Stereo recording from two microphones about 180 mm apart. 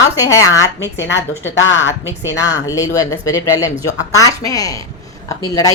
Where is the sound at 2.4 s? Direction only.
20° left (ahead or behind).